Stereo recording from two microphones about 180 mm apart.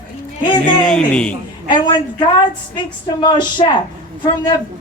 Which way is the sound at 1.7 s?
25° left (ahead or behind).